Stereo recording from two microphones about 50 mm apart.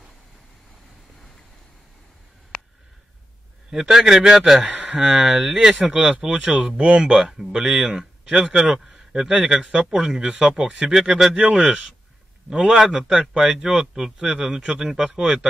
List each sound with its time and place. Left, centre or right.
3.7 s speech: centre
4.6 s speech: right
5.2 s speech: centre
7.2 s speech: centre